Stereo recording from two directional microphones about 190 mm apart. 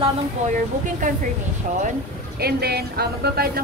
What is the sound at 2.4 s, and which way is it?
Speech, 55° right (ahead or behind).